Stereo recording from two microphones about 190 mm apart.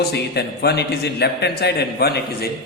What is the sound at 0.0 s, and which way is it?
A man's voice, 60° left (ahead or behind).